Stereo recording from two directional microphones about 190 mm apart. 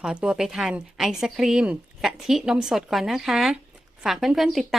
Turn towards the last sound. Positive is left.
turn(degrees=0)  # may be behind; listen again after turning